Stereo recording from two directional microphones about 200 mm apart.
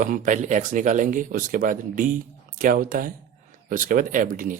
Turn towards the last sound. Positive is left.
turn(degrees=-45)  # may be behind; listen again after turning